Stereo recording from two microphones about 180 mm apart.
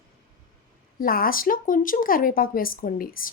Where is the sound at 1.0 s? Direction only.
55° left (ahead or behind).